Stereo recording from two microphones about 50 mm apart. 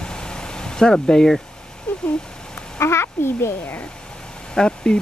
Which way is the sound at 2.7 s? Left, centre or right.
Left.